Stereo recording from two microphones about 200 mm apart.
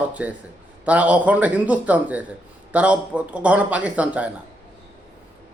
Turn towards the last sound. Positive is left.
turn(degrees=-5)  # may be behind; listen again after turning